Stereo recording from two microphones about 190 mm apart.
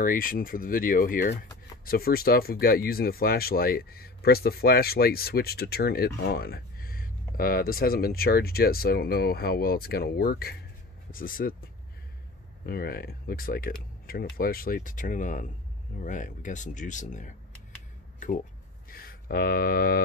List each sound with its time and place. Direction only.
0.0 s speech: 45° left (ahead or behind)
12.6 s speech: 50° left (ahead or behind)
18.9 s speech: 50° left (ahead or behind)